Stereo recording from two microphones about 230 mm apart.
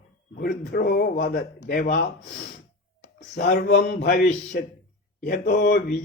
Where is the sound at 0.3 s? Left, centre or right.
Left.